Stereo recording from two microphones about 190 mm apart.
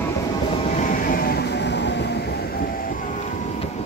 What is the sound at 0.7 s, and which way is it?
Train, 45° left (ahead or behind).